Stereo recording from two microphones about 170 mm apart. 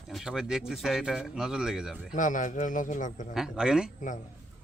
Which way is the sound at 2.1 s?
50° left (ahead or behind).